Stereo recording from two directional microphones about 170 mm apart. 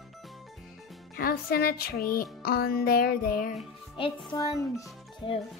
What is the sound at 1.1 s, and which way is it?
Speech, 60° left (ahead or behind).